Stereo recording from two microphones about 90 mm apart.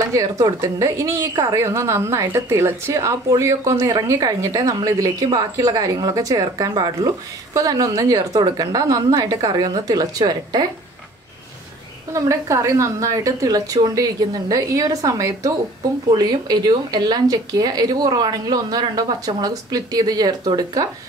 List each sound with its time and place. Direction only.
0.0 s a woman's voice: 40° right (ahead or behind)
12.1 s a woman's voice: 35° right (ahead or behind)
16.1 s speech: 50° right (ahead or behind)